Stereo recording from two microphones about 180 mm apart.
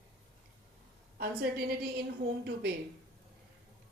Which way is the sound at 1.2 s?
60° right (ahead or behind).